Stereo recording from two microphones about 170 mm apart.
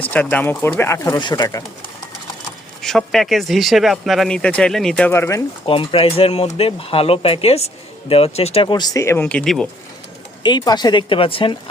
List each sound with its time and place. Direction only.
0.0 s speech: 10° left (ahead or behind)
2.8 s speech: centre (ahead or behind)
5.1 s speech: 15° left (ahead or behind)
5.6 s speech: 30° left (ahead or behind); by 9.6 s 5° left (ahead or behind)
10.4 s speech: 25° left (ahead or behind)